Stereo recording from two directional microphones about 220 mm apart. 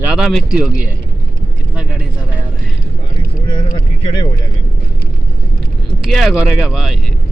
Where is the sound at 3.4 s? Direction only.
20° left (ahead or behind).